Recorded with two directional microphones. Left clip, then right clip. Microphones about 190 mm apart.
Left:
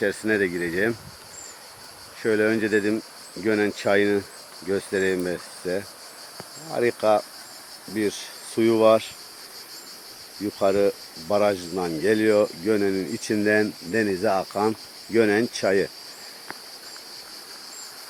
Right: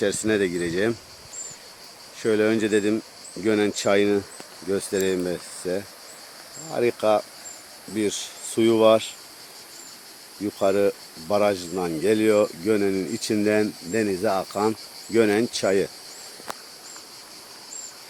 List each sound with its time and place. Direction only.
0.0 s speech: 20° right (ahead or behind)
2.2 s speech: 20° right (ahead or behind)
10.6 s speech: 10° right (ahead or behind)